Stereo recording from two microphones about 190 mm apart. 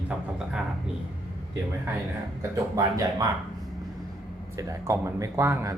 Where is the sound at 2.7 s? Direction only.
20° right (ahead or behind).